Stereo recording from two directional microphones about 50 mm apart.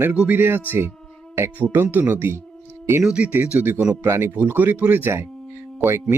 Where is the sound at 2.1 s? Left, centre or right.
Right.